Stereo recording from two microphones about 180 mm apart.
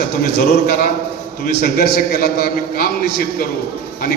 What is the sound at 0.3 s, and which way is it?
A man's voice, 60° left (ahead or behind).